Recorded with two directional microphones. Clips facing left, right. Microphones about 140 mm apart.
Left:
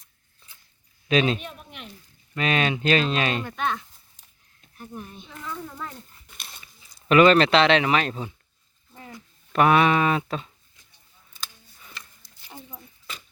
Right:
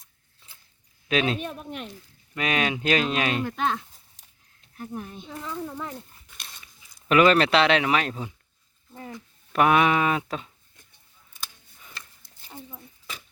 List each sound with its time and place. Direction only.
1.0 s speech: centre (ahead or behind)
1.5 s a sound: 40° right (ahead or behind)
2.3 s speech: 10° right (ahead or behind)
5.2 s a child's voice: 25° right (ahead or behind)
5.5 s speech: 15° right (ahead or behind)
7.1 s speech: 5° right (ahead or behind)
9.5 s speech: 10° right (ahead or behind)
12.7 s keys jangling: 5° right (ahead or behind)